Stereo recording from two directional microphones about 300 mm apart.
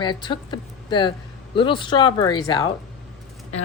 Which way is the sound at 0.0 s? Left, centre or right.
Centre.